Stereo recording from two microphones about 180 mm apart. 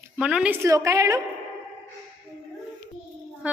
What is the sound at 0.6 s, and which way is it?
Speech, 15° right (ahead or behind).